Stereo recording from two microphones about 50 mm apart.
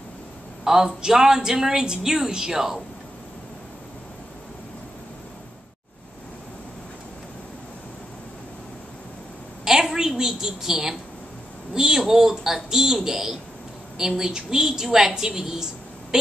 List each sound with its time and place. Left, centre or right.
0.7 s a woman's voice: centre
9.7 s a sound: centre
11.7 s a woman's voice: centre